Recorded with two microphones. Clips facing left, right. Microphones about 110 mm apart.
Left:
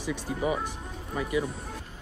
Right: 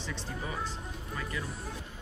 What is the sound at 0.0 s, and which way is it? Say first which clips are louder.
Speech: left 9 dB; 10° left (ahead or behind).